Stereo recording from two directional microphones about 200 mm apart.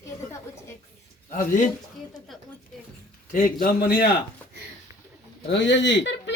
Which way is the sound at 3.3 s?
45° left (ahead or behind).